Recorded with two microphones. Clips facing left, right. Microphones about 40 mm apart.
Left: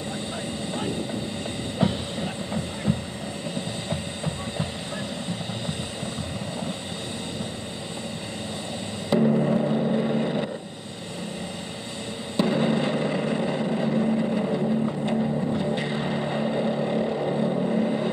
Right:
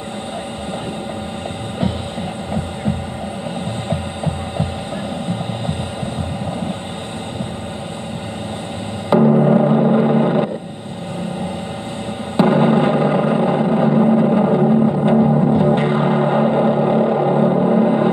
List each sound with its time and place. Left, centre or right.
2.5 s hum: right
3.9 s music: right
9.2 s music: right
12.4 s vehicle: right
14.4 s vehicle: right
15.1 s music: right
15.6 s music: right
17.1 s vehicle: right